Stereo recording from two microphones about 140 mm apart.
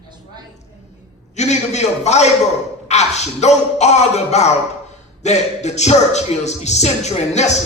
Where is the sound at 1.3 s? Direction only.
55° left (ahead or behind).